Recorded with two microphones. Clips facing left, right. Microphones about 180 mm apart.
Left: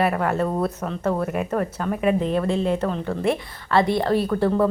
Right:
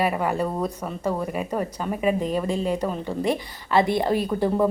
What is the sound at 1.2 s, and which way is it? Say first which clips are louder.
A woman's voice: left 3 dB; 5° left (ahead or behind).